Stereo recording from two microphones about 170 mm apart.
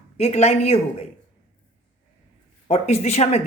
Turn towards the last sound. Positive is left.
turn(degrees=40)  # may be behind; listen again after turning